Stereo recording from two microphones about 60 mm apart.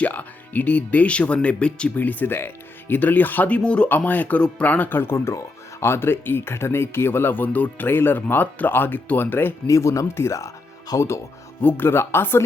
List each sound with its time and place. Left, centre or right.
0.0 s speech: left
2.0 s speech: left
3.8 s speech: left
9.6 s speech: left
11.6 s speech: left